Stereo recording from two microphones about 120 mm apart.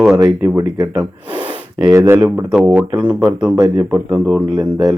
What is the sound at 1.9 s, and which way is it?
Speech, 20° right (ahead or behind).